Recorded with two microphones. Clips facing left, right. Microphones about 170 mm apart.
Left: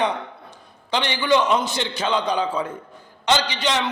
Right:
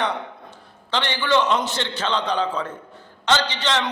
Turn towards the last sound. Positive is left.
turn(degrees=15)  # may be behind; listen again after turning